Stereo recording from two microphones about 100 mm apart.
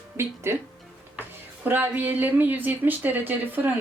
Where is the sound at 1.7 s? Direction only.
20° right (ahead or behind).